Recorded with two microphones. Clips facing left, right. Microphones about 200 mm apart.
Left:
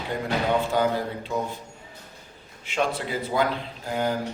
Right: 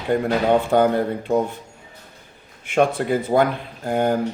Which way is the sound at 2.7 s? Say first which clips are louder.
Right 8 dB; 55° right (ahead or behind).